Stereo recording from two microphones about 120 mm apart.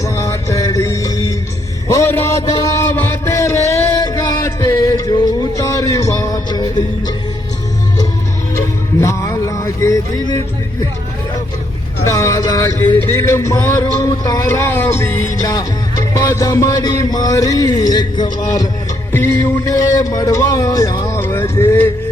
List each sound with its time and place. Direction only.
0.0 s music: 25° left (ahead or behind)
1.9 s a sound: 20° left (ahead or behind)
3.7 s music: 25° left (ahead or behind)
8.5 s music: 25° left (ahead or behind)
12.0 s vehicle: 25° left (ahead or behind)
13.0 s music: 20° left (ahead or behind)
19.1 s speech: 20° left (ahead or behind)